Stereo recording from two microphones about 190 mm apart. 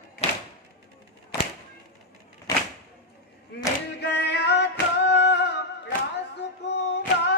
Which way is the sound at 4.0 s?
60° left (ahead or behind).